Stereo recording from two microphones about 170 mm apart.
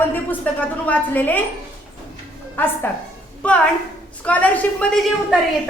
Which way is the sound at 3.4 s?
5° left (ahead or behind).